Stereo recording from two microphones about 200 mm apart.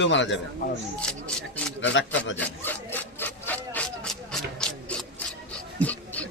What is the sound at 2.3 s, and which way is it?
Rub, 10° left (ahead or behind).